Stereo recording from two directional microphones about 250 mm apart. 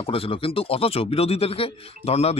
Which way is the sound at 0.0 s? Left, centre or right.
Left.